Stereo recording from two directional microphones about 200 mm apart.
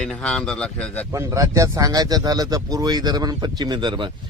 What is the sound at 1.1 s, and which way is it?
A man's voice, 15° right (ahead or behind).